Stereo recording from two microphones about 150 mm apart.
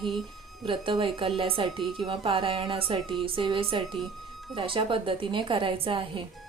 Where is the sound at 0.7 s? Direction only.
35° right (ahead or behind).